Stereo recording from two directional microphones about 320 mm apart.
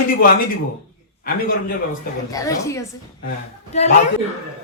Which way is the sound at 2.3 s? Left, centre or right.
Centre.